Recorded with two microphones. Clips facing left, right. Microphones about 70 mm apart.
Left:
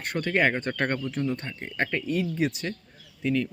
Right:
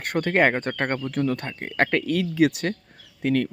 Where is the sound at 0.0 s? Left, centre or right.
Right.